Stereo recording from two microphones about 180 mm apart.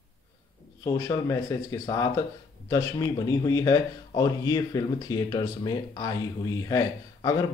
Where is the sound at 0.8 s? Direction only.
20° left (ahead or behind).